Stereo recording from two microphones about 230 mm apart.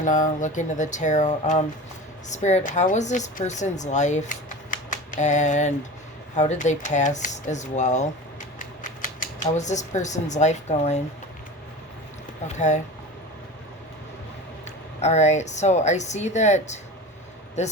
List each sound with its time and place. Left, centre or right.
0.0 s speech: left
9.4 s speech: left
12.5 s speech: left
15.0 s speech: left